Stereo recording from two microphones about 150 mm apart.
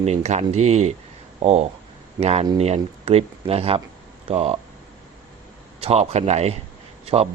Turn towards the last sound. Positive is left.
turn(degrees=-40)  # may be behind; listen again after turning